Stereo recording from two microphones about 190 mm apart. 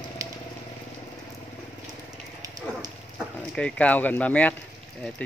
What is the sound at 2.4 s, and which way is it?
Dog, 20° right (ahead or behind).